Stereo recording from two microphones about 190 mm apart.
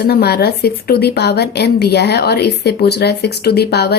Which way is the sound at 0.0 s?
55° left (ahead or behind).